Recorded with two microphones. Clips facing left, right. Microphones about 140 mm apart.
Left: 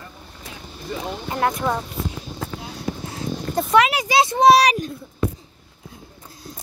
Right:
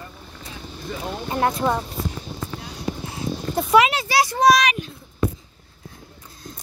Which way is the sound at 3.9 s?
20° left (ahead or behind).